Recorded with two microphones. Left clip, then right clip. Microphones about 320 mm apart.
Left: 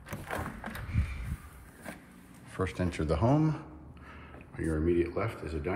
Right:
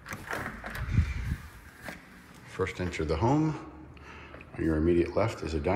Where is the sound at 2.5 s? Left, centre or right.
Centre.